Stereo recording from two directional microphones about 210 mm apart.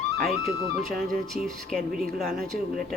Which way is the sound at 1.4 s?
Centre (ahead or behind).